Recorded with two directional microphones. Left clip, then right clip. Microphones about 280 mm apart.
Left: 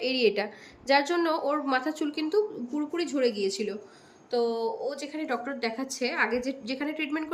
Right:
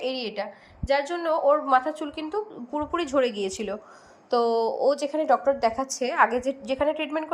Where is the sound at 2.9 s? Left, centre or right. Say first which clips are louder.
Right 3 dB; right.